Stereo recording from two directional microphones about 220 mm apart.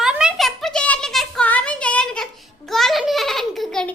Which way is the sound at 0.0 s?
5° right (ahead or behind).